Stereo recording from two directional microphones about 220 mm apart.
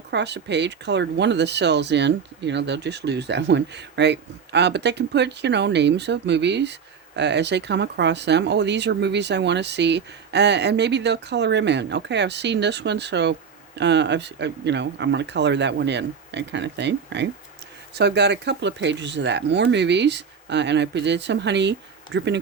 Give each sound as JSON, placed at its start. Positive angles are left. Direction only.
{"t": 0.1, "sound": "speech", "side_deg": -50}